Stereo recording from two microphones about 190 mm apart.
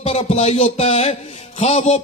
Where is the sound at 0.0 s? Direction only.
35° left (ahead or behind).